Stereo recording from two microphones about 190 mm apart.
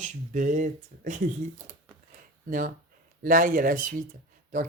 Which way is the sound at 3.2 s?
45° right (ahead or behind).